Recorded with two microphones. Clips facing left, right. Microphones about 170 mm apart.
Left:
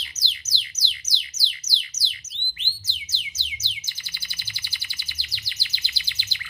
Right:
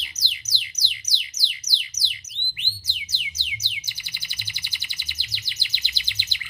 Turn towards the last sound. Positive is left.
turn(degrees=-15)  # may be behind; listen again after turning